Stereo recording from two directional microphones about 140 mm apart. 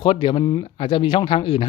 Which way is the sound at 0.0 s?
35° left (ahead or behind).